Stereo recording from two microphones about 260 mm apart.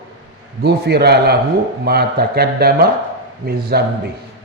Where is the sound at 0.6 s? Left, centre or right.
Right.